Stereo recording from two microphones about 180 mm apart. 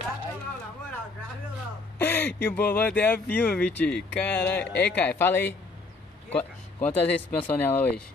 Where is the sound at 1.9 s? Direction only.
10° left (ahead or behind).